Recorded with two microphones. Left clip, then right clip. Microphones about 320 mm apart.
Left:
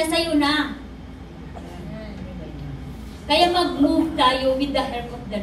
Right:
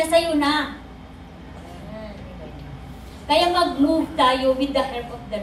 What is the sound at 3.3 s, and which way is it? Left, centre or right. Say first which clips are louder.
A woman's voice: even; centre.